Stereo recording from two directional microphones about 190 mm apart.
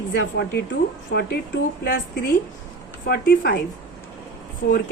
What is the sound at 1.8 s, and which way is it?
A woman's voice, 55° left (ahead or behind).